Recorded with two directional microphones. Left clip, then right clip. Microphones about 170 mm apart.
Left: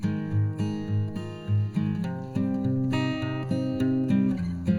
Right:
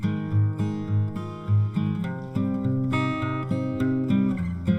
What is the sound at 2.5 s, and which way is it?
Music, 25° right (ahead or behind).